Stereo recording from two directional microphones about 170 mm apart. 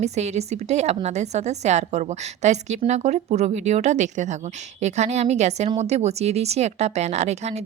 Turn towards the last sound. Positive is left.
turn(degrees=-40)  # may be behind; listen again after turning